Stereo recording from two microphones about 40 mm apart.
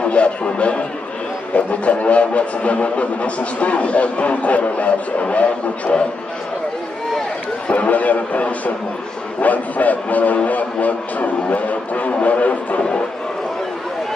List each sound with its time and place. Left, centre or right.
0.0 s a man's voice: left
1.5 s music: left
7.6 s music: left